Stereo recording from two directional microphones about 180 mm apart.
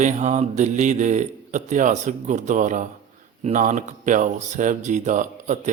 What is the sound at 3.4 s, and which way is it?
Speech, 45° right (ahead or behind).